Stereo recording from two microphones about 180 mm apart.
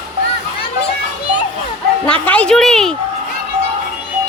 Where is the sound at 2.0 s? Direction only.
5° left (ahead or behind).